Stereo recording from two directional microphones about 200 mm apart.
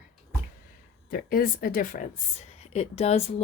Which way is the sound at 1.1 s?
45° left (ahead or behind).